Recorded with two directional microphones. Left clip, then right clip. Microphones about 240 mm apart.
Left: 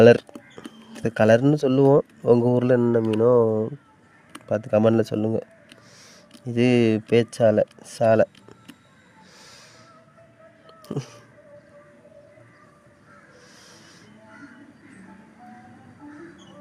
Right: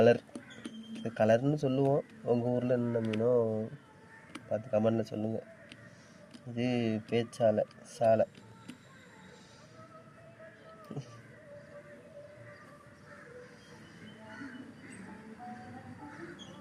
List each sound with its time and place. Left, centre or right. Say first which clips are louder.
0.0 s speech: left 11 dB; left
6.6 s speech: left 14 dB; left
10.8 s a sound: left 14 dB; left